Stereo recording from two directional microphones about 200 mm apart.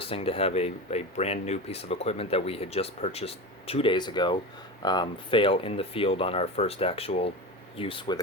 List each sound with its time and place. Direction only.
0.0 s speech: 30° left (ahead or behind)